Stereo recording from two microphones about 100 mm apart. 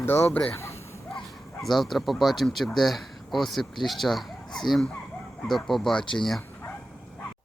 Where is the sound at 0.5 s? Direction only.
30° left (ahead or behind).